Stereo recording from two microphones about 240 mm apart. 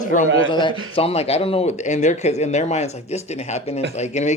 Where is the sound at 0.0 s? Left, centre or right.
Left.